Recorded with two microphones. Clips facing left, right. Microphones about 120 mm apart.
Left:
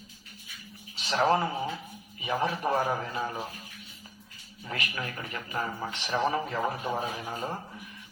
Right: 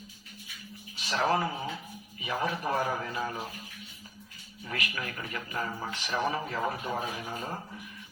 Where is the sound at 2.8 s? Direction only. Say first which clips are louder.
Left 2 dB; 15° left (ahead or behind).